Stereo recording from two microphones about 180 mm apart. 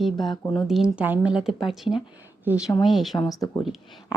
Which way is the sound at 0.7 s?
5° right (ahead or behind).